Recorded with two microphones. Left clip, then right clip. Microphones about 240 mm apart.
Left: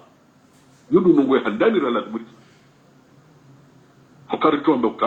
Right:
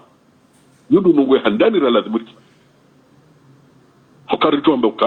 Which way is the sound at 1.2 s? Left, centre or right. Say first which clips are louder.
Right 4 dB; right.